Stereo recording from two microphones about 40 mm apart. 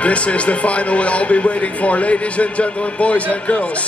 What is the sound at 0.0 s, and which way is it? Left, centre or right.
Speech, left.